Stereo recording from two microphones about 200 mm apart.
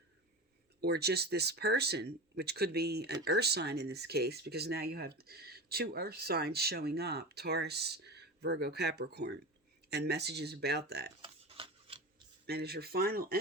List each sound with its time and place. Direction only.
0.8 s speech: 55° right (ahead or behind)
11.2 s rub: 25° right (ahead or behind)
12.5 s speech: 50° right (ahead or behind)